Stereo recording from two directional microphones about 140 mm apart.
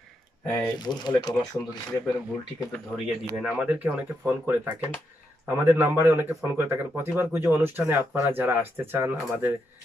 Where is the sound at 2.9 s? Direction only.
10° right (ahead or behind).